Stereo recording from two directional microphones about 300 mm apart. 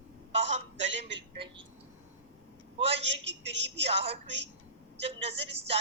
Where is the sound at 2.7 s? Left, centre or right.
Centre.